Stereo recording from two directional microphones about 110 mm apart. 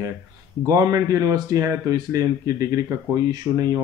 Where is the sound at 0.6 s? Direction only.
30° right (ahead or behind).